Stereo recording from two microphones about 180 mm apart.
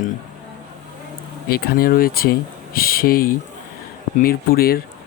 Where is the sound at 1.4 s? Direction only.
55° left (ahead or behind).